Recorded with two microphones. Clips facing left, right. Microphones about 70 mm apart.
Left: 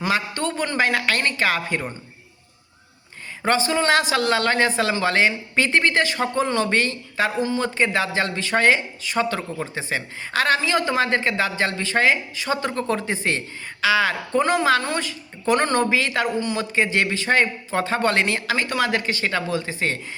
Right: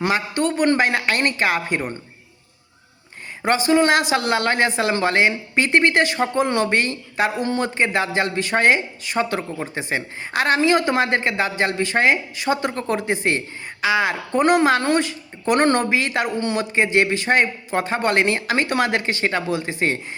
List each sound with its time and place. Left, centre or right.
0.1 s speech: right
3.7 s speech: right